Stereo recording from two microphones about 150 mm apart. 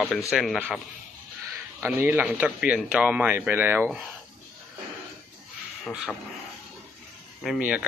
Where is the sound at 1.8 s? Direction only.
15° right (ahead or behind).